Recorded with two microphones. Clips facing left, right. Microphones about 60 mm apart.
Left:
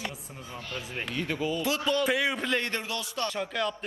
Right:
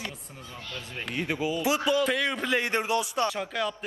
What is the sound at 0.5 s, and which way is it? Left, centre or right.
Speech, left.